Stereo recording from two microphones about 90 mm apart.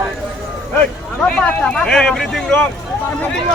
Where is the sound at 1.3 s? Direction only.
10° left (ahead or behind).